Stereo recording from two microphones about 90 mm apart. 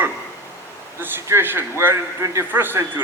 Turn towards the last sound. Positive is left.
turn(degrees=-25)  # may be behind; listen again after turning